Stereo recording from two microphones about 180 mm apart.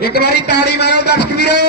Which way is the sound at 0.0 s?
60° left (ahead or behind).